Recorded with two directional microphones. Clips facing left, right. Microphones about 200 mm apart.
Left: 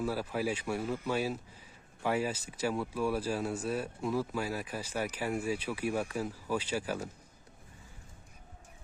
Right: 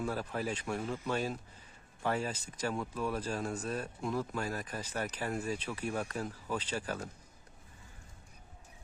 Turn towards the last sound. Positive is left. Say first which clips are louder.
# left 3 dB
turn(degrees=10)  # may be behind; listen again after turning